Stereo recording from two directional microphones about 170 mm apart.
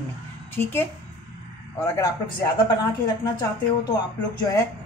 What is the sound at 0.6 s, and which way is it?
Speech, 15° left (ahead or behind).